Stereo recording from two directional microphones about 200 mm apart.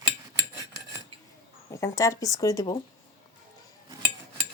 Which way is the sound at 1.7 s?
15° left (ahead or behind).